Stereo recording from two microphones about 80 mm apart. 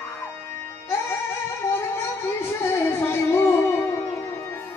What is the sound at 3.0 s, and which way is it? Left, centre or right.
Music, left.